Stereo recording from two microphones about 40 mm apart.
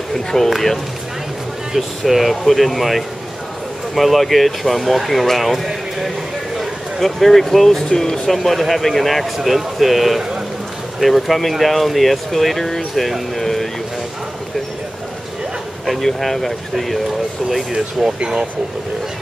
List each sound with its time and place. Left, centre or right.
0.5 s speech: centre
1.8 s speech: centre
8.4 s speech: centre
13.4 s a sound: centre
15.8 s speech: centre
18.2 s speech: right